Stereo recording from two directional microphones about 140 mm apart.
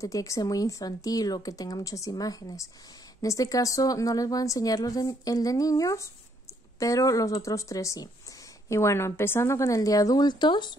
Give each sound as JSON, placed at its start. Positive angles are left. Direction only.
{"t": 0.0, "sound": "a woman's voice", "side_deg": 25}